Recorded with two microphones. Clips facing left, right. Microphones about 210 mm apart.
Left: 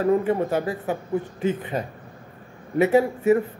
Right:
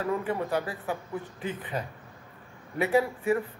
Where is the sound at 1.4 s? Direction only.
25° left (ahead or behind).